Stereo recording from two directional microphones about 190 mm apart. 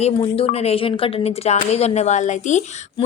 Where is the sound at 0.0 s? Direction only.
30° left (ahead or behind).